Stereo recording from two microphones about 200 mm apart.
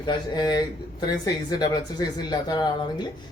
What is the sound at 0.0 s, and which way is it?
Speech, 20° left (ahead or behind).